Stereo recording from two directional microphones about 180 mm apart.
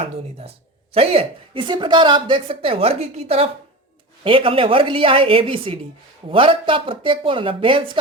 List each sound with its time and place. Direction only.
0.0 s a woman's voice: 35° right (ahead or behind)